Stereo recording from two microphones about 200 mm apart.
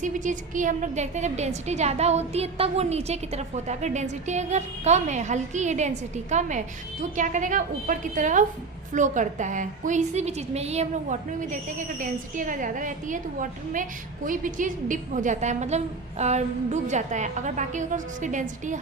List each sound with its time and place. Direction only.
0.0 s a woman's voice: 40° right (ahead or behind)